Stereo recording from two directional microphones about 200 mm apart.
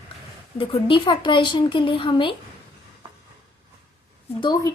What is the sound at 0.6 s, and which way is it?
A woman's voice, 25° left (ahead or behind).